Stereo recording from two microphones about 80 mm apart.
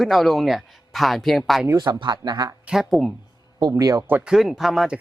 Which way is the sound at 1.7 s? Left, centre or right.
Right.